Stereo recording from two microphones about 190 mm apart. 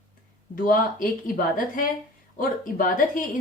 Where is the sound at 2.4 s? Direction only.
45° left (ahead or behind).